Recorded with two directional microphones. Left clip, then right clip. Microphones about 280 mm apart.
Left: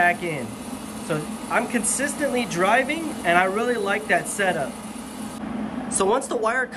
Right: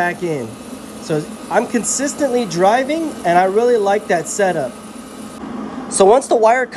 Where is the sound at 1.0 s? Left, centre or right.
Centre.